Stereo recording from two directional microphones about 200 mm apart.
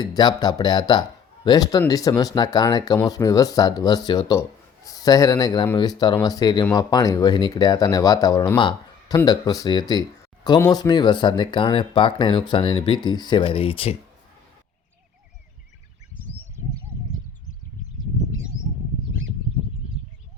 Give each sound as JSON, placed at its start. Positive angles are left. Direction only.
{"t": 0.0, "sound": "speech", "side_deg": 20}